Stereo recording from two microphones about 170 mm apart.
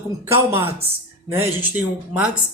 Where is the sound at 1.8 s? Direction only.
5° right (ahead or behind).